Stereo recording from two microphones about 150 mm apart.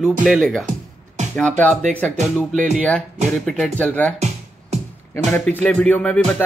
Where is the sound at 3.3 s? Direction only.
5° left (ahead or behind).